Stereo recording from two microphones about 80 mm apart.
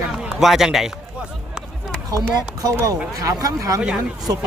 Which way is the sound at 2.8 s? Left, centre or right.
Right.